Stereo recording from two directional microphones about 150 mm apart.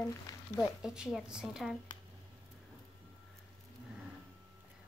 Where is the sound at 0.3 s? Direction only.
20° left (ahead or behind).